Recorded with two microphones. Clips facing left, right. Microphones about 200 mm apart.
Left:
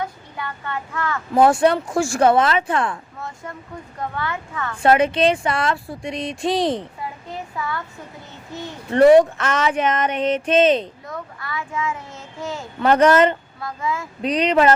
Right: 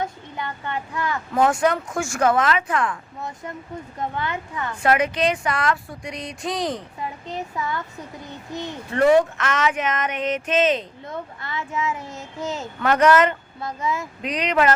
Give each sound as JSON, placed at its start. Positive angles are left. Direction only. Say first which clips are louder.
{"t": 0.0, "sound": "speech", "louder": "even", "side_deg": -20}
{"t": 1.3, "sound": "speech", "louder": "left 5 dB", "side_deg": 35}
{"t": 3.2, "sound": "speech", "louder": "right 1 dB", "side_deg": -20}
{"t": 4.8, "sound": "speech", "louder": "left 4 dB", "side_deg": 30}
{"t": 8.5, "sound": "speech", "louder": "right 1 dB", "side_deg": -15}
{"t": 8.9, "sound": "speech", "louder": "left 5 dB", "side_deg": 35}
{"t": 11.0, "sound": "a child's voice", "louder": "even", "side_deg": -25}
{"t": 12.8, "sound": "speech", "louder": "left 3 dB", "side_deg": 30}
{"t": 13.6, "sound": "speech", "louder": "even", "side_deg": -20}
{"t": 14.2, "sound": "speech", "louder": "left 5 dB", "side_deg": 30}